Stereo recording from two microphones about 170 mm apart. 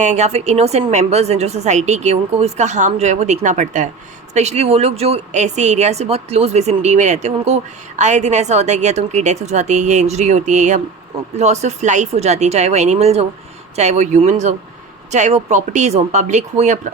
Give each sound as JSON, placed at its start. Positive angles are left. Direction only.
{"t": 0.0, "sound": "a woman's voice", "side_deg": -45}